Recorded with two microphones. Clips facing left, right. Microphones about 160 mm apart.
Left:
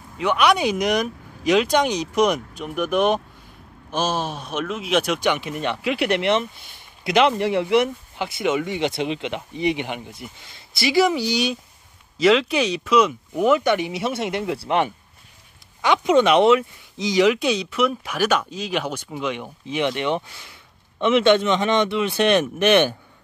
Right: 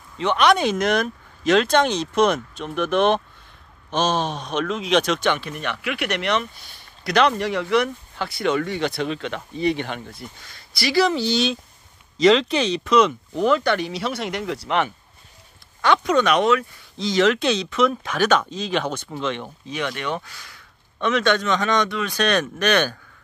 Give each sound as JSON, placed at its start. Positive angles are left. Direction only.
{"t": 0.2, "sound": "speech", "side_deg": 10}
{"t": 19.6, "sound": "speech", "side_deg": 20}